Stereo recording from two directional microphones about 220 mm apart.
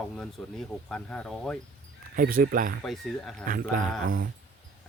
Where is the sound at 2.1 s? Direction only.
40° right (ahead or behind).